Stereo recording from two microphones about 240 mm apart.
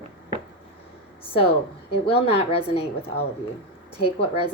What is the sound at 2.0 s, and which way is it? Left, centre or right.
Speech, left.